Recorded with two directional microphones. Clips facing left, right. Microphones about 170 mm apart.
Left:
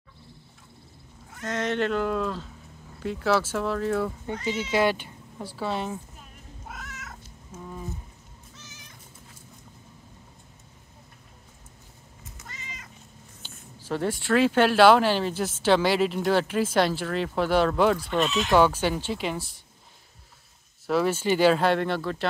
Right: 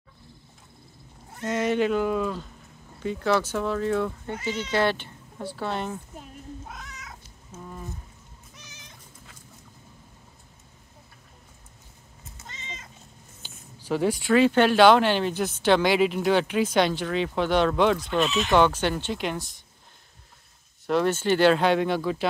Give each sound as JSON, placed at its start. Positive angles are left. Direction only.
{"t": 1.5, "sound": "speech", "side_deg": -5}
{"t": 6.7, "sound": "cat", "side_deg": 5}
{"t": 8.5, "sound": "cat", "side_deg": -15}
{"t": 12.4, "sound": "cat", "side_deg": -25}
{"t": 13.4, "sound": "speech", "side_deg": 0}
{"t": 20.8, "sound": "speech", "side_deg": 5}